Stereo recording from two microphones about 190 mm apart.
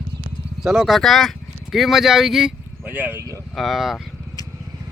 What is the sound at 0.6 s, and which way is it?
Speech, centre (ahead or behind).